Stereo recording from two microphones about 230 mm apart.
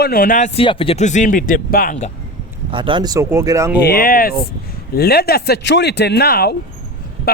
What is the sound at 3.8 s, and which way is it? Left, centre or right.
A man's voice, left.